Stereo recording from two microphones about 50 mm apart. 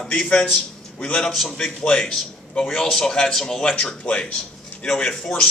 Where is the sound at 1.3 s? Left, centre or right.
Centre.